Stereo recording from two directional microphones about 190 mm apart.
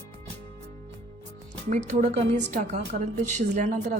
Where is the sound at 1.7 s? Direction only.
40° right (ahead or behind).